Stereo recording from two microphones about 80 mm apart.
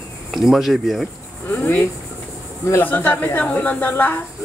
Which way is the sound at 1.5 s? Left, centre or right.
Left.